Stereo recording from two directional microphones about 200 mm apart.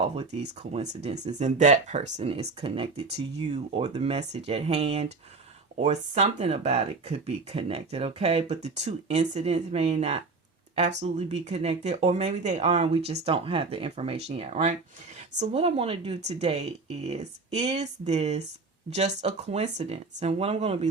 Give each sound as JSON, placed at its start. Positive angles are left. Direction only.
{"t": 0.0, "sound": "speech", "side_deg": -30}